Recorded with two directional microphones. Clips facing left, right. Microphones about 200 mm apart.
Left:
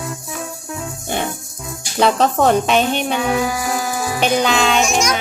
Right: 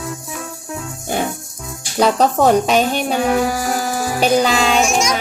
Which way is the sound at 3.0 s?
40° right (ahead or behind).